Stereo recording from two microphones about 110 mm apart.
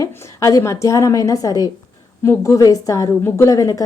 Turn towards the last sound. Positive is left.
turn(degrees=30)  # may be behind; listen again after turning